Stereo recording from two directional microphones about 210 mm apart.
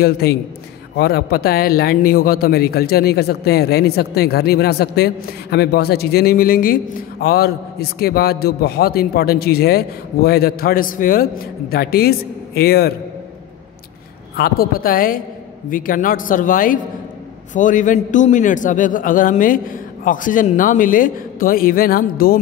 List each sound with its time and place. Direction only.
0.0 s speech: 50° left (ahead or behind)
14.3 s a man's voice: 45° left (ahead or behind)